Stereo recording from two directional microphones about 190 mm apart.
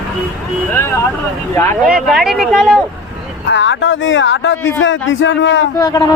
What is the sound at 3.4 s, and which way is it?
Speech, 70° left (ahead or behind).